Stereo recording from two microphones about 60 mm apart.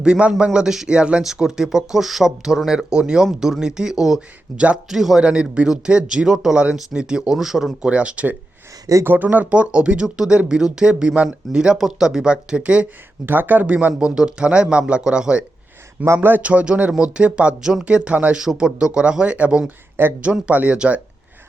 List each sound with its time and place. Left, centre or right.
0.0 s speech: centre
5.2 s speech: centre
7.9 s speech: centre
13.2 s speech: right; by 15.4 s centre
16.0 s speech: right
16.4 s speech: right
19.6 s speech: right
20.5 s speech: right